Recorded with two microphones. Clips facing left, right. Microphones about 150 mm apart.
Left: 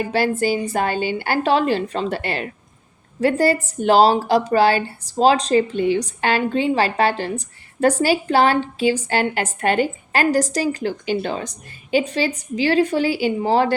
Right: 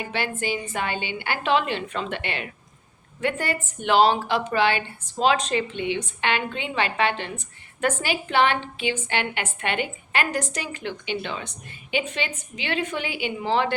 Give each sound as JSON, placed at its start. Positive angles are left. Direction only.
{"t": 0.0, "sound": "a woman's voice", "side_deg": 40}